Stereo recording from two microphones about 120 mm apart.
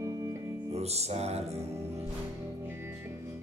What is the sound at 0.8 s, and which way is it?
Music, 60° right (ahead or behind).